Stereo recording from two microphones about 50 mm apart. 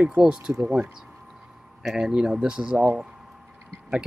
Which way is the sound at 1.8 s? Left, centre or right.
Centre.